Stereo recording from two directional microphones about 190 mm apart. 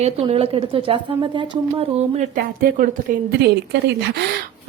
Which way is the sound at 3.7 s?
60° right (ahead or behind).